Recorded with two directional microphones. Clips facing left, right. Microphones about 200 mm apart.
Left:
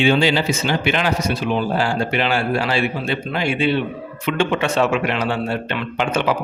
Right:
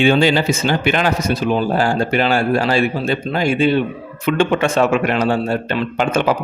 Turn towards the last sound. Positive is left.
turn(degrees=-45)  # may be behind; listen again after turning